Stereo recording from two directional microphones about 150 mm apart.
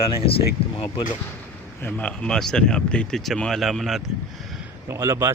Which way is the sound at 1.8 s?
10° left (ahead or behind).